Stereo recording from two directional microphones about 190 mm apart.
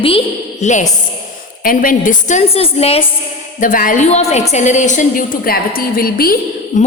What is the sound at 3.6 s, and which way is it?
A woman's voice, 45° left (ahead or behind).